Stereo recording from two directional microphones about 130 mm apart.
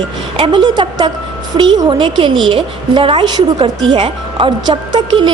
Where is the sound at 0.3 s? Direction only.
40° right (ahead or behind).